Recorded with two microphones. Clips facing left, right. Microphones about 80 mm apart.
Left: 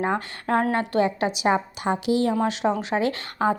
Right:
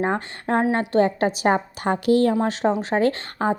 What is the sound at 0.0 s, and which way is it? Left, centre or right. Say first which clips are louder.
A woman's voice: right 1 dB; right.